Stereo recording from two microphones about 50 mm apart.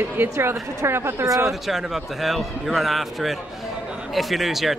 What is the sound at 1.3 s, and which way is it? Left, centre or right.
A man's voice, centre.